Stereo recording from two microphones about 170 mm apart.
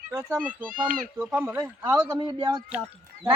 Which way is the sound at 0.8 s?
5° right (ahead or behind).